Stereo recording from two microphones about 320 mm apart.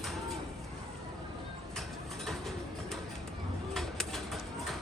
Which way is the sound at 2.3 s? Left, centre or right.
Centre.